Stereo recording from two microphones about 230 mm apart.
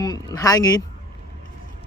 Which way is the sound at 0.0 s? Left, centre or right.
Centre.